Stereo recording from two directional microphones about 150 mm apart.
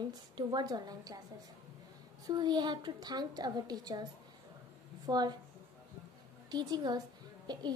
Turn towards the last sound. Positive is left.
turn(degrees=-30)  # may be behind; listen again after turning